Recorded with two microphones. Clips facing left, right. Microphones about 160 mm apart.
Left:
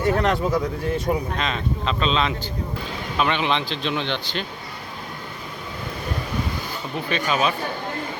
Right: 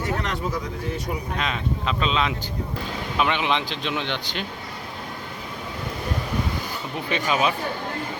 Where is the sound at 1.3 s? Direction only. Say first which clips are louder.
Left 1 dB; 10° right (ahead or behind).